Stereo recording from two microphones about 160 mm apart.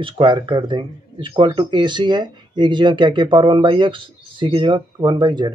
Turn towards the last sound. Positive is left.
turn(degrees=-30)  # may be behind; listen again after turning